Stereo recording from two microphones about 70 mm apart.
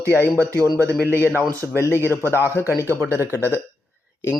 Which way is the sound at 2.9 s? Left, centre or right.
Right.